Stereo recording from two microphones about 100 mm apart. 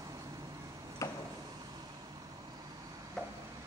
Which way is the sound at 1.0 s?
30° left (ahead or behind).